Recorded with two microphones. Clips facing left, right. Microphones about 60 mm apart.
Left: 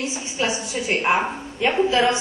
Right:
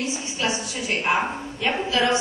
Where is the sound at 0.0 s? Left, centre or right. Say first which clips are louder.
Left 1 dB; left.